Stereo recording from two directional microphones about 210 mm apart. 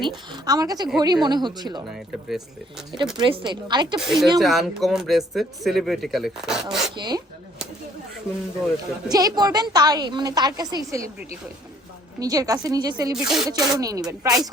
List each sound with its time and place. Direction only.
0.3 s a woman's voice: 20° right (ahead or behind)
3.2 s a woman's voice: 25° right (ahead or behind)
4.0 s speech: centre (ahead or behind)
6.9 s a woman's voice: 20° right (ahead or behind)
9.0 s a woman's voice: 20° right (ahead or behind)
12.2 s speech: 15° right (ahead or behind)
13.1 s speech: centre (ahead or behind)
13.5 s speech: 15° right (ahead or behind)